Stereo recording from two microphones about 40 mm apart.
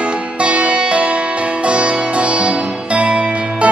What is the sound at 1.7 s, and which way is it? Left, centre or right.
Sitar, right.